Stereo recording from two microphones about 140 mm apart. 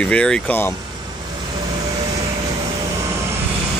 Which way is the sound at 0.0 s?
5° left (ahead or behind).